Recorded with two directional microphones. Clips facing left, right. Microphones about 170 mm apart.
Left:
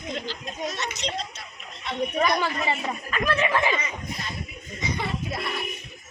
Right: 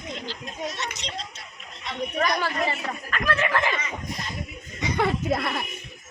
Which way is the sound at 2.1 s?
15° left (ahead or behind).